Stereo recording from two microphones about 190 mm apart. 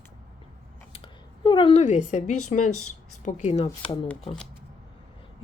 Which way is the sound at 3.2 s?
40° left (ahead or behind).